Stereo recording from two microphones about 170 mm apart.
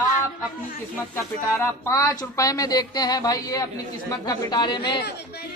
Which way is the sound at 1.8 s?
20° left (ahead or behind).